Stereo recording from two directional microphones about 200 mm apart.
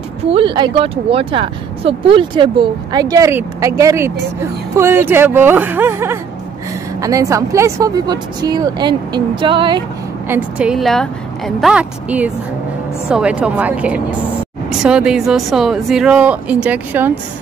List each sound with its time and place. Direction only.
0.2 s speech: 25° right (ahead or behind)
10.2 s speech: 10° right (ahead or behind)